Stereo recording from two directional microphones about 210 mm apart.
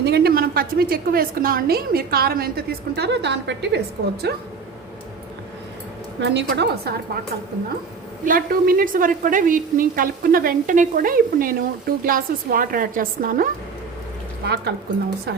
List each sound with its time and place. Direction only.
0.0 s a woman's voice: 50° right (ahead or behind)
6.1 s a woman's voice: 55° right (ahead or behind)
8.2 s a woman's voice: 40° right (ahead or behind)
14.4 s a woman's voice: 50° right (ahead or behind)